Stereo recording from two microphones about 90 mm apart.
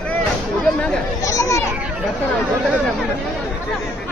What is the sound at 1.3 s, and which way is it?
Speech, 35° left (ahead or behind).